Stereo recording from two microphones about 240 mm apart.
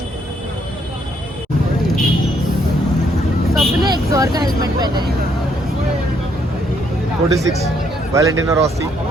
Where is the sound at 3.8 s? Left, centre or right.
Centre.